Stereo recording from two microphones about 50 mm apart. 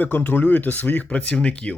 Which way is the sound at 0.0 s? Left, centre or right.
Left.